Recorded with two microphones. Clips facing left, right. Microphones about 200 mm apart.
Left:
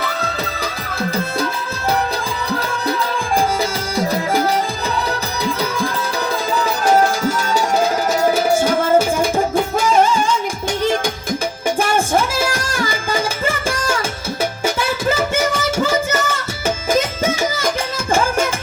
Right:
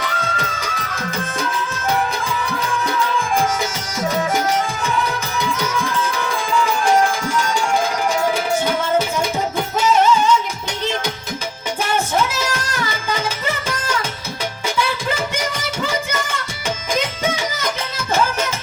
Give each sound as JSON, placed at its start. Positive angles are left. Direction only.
{"t": 3.6, "sound": "music", "side_deg": 35}
{"t": 6.8, "sound": "tabla", "side_deg": 40}
{"t": 9.8, "sound": "music", "side_deg": 50}
{"t": 11.9, "sound": "music", "side_deg": 10}
{"t": 14.8, "sound": "music", "side_deg": 45}